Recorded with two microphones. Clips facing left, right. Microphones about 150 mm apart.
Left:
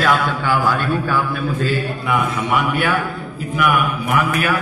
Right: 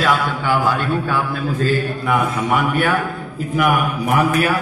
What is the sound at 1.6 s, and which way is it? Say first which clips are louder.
A man's voice: right 2 dB; 40° right (ahead or behind).